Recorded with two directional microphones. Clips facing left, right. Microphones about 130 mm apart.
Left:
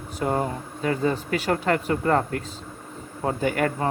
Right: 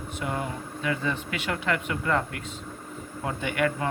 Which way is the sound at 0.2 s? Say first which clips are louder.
Left 7 dB; 40° left (ahead or behind).